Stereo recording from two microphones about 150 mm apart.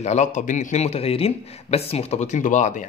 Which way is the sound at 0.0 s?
50° left (ahead or behind).